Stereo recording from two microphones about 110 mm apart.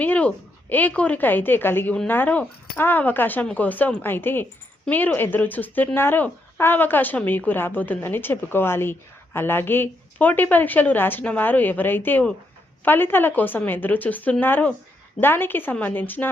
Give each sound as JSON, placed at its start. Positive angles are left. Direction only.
{"t": 0.0, "sound": "a woman's voice", "side_deg": 15}